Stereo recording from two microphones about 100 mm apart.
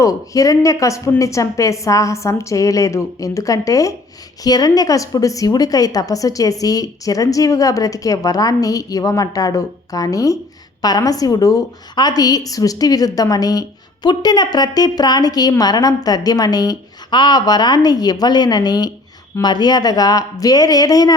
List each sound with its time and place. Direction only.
0.0 s a woman's voice: 35° left (ahead or behind)